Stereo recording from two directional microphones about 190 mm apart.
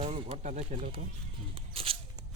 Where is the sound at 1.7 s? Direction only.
30° right (ahead or behind).